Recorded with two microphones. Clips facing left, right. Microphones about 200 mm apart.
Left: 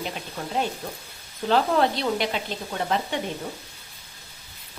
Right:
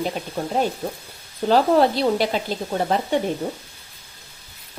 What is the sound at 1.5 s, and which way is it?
Speech, 35° right (ahead or behind).